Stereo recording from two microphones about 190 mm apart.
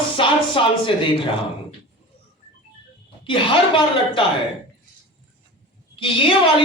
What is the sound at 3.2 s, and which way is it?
A man's voice, 25° left (ahead or behind).